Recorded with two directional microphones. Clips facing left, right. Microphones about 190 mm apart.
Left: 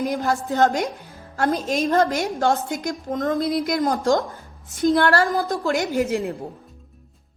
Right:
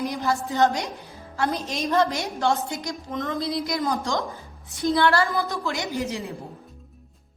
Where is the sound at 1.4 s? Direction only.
50° left (ahead or behind).